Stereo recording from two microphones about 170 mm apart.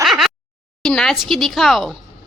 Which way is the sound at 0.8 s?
5° left (ahead or behind).